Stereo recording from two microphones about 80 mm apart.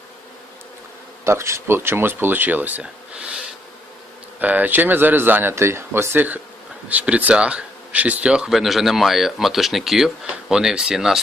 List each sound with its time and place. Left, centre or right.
1.2 s speech: right; by 11.2 s centre